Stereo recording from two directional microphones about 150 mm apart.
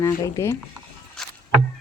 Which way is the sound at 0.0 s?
20° left (ahead or behind).